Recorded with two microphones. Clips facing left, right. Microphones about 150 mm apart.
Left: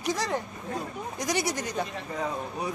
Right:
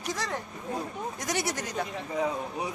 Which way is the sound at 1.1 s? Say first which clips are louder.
Left 4 dB; centre (ahead or behind).